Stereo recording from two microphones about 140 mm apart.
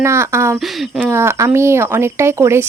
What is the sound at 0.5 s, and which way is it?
Speech, centre (ahead or behind).